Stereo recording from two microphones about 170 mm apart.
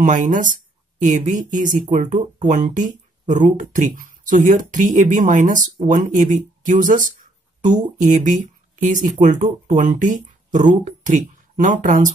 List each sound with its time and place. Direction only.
0.0 s speech: 50° right (ahead or behind)